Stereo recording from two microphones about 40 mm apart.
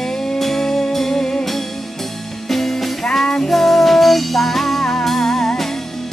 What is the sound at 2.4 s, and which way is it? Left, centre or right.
Music, centre.